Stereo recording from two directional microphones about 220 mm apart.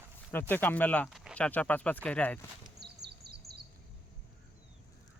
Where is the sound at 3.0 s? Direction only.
45° right (ahead or behind).